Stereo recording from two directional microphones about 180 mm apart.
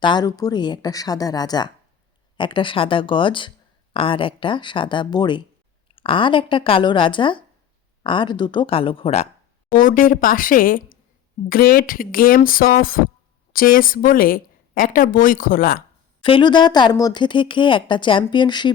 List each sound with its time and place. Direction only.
0.0 s speech: 25° left (ahead or behind)
9.7 s speech: 50° left (ahead or behind)
16.2 s speech: 25° left (ahead or behind)